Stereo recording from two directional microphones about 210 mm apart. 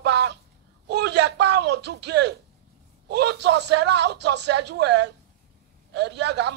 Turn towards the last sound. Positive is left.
turn(degrees=-55)  # may be behind; listen again after turning